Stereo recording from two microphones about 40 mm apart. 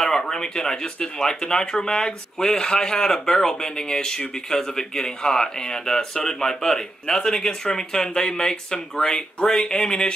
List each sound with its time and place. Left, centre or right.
0.0 s speech: centre